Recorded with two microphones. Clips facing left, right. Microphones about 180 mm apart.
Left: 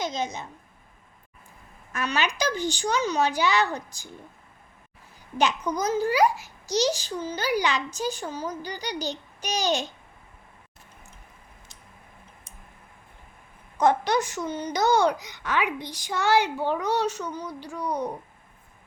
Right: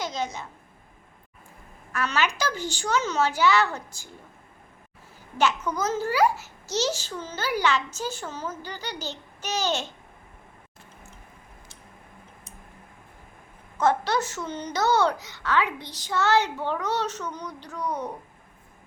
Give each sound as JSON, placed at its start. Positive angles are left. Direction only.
{"t": 0.0, "sound": "a child's voice", "side_deg": 20}
{"t": 1.9, "sound": "a child's voice", "side_deg": 15}
{"t": 5.4, "sound": "a child's voice", "side_deg": 15}
{"t": 13.7, "sound": "a child's voice", "side_deg": 15}